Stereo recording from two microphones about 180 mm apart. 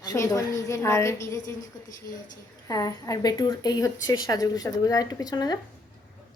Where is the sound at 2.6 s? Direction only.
20° left (ahead or behind).